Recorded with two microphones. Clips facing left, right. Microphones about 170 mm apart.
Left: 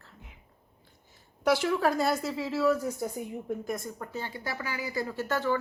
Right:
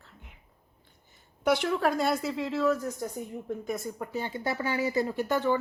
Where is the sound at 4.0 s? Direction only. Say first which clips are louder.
Right 4 dB; 15° right (ahead or behind).